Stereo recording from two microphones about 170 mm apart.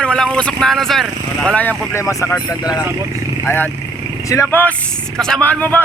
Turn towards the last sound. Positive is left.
turn(degrees=10)  # may be behind; listen again after turning